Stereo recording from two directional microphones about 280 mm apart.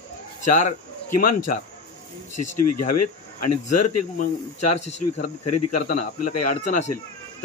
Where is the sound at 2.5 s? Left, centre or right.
Left.